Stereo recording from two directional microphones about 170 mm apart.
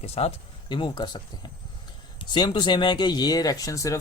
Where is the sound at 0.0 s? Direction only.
35° left (ahead or behind).